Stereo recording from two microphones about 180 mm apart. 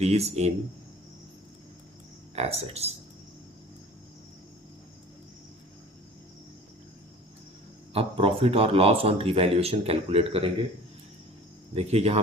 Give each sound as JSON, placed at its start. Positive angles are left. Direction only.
{"t": 0.0, "sound": "speech", "side_deg": -35}
{"t": 2.3, "sound": "speech", "side_deg": -35}
{"t": 7.9, "sound": "speech", "side_deg": -30}
{"t": 11.7, "sound": "speech", "side_deg": -35}